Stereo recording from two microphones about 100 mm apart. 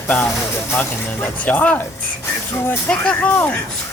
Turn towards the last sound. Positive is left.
turn(degrees=15)  # may be behind; listen again after turning